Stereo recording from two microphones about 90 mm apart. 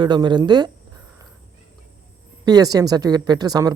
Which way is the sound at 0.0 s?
55° right (ahead or behind).